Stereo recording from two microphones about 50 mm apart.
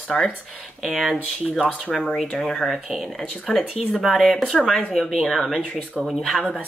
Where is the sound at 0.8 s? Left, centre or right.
Centre.